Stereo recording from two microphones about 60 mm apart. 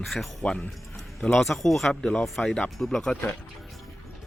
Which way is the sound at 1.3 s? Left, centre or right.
Centre.